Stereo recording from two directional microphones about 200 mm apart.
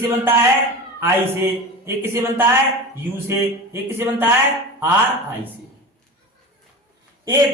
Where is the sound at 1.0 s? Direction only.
10° right (ahead or behind).